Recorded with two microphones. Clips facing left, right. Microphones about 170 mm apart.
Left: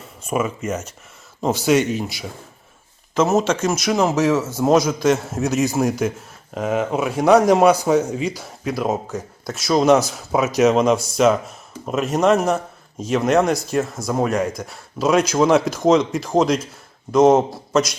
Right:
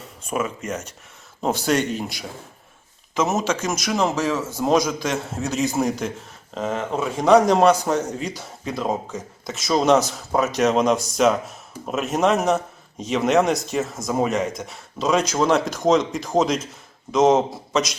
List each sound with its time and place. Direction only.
0.3 s a man's voice: 5° left (ahead or behind)
3.4 s a man's voice: 5° left (ahead or behind)